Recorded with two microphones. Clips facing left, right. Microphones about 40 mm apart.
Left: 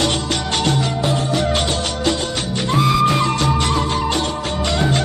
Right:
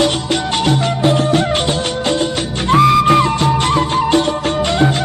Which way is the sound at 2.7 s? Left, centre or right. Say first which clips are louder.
Right 6 dB; right.